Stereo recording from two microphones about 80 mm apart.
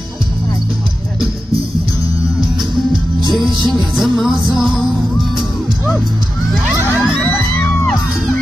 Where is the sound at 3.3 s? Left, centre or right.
Centre.